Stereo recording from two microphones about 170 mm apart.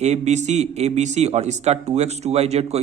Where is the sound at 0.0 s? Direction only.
40° right (ahead or behind).